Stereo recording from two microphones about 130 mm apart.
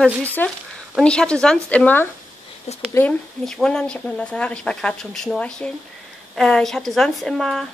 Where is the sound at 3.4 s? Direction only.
5° left (ahead or behind).